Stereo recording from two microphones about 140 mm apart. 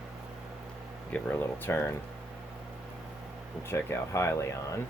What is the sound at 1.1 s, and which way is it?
Speech, 15° left (ahead or behind).